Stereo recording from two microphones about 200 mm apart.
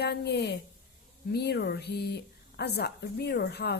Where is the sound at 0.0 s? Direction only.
55° left (ahead or behind).